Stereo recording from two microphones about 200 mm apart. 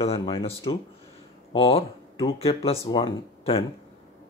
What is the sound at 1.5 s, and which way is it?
Speech, 25° left (ahead or behind).